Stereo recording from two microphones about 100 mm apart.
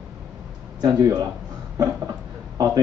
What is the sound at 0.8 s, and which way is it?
Speech, 40° right (ahead or behind).